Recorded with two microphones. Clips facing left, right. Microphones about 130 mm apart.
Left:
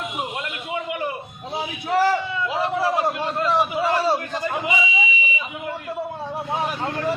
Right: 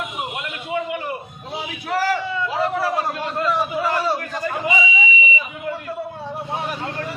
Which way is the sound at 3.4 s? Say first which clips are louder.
Left 1 dB; 25° left (ahead or behind).